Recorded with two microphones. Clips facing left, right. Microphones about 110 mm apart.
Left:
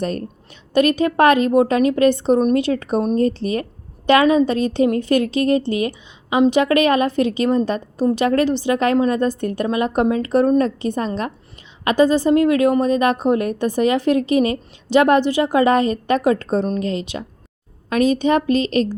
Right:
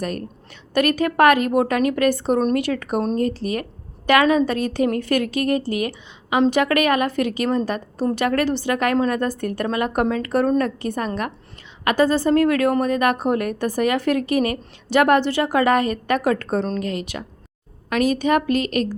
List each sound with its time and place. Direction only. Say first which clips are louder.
0.0 s a woman's voice: left 3 dB; 30° left (ahead or behind)